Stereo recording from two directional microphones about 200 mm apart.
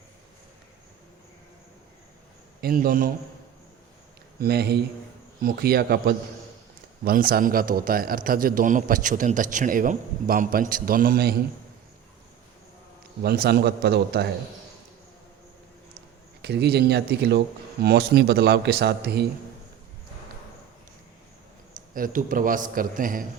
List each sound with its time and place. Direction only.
2.6 s a man's voice: 45° right (ahead or behind)
4.4 s a man's voice: 50° right (ahead or behind)
13.2 s a man's voice: 50° right (ahead or behind)
16.4 s a man's voice: 55° right (ahead or behind)
21.9 s a man's voice: 45° right (ahead or behind)